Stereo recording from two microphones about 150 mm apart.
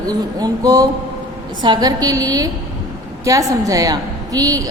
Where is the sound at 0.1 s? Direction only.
25° right (ahead or behind).